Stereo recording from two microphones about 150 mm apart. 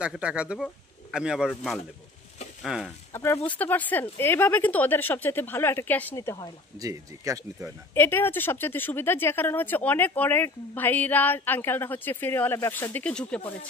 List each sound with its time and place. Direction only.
0.0 s speech: 5° right (ahead or behind)
3.1 s speech: 15° left (ahead or behind)
6.8 s speech: 25° right (ahead or behind)
7.9 s speech: 15° left (ahead or behind)